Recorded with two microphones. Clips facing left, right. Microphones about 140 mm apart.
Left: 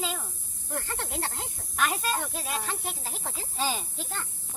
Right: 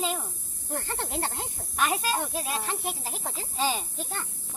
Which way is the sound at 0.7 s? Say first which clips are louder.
Right 2 dB; 25° right (ahead or behind).